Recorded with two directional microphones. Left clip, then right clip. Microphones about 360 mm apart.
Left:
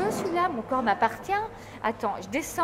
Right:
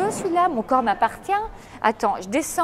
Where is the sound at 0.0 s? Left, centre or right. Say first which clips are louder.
Right 6 dB; right.